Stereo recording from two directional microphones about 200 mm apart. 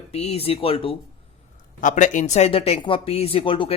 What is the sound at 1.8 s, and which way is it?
Speech, 40° left (ahead or behind).